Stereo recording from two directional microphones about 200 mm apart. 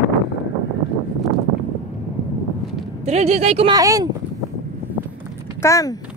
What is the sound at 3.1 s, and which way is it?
Speech, 35° right (ahead or behind).